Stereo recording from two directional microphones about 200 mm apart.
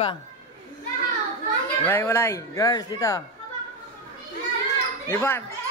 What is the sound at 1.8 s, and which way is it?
Speech, 10° left (ahead or behind).